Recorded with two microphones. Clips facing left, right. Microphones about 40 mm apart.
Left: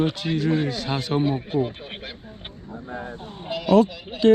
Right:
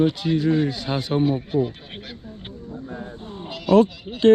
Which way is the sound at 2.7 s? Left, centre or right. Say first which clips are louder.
Left 1 dB; left.